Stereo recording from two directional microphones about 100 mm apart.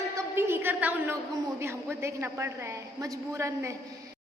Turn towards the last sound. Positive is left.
turn(degrees=-30)  # may be behind; listen again after turning